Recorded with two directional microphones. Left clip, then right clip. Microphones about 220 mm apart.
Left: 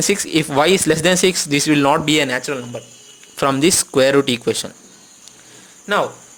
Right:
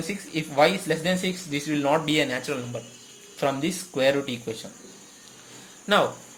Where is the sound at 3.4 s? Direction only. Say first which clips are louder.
Left 10 dB; 35° left (ahead or behind).